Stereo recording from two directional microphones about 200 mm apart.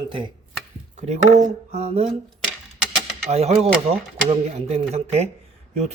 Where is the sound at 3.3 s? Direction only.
30° right (ahead or behind).